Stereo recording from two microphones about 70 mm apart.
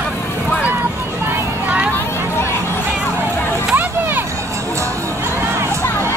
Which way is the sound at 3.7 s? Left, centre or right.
Right.